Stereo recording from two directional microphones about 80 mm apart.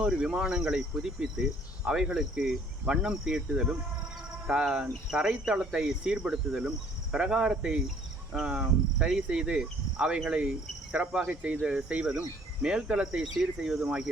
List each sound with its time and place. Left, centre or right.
0.0 s speech: centre